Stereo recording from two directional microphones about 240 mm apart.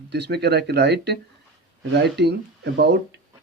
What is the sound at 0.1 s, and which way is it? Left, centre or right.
A man's voice, right.